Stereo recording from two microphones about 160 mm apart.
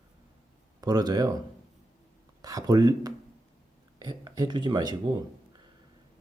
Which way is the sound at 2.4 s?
25° right (ahead or behind).